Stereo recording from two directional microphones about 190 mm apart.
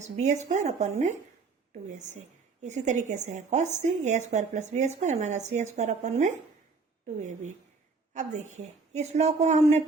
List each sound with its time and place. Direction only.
0.2 s speech: 40° right (ahead or behind)
2.6 s speech: 40° right (ahead or behind)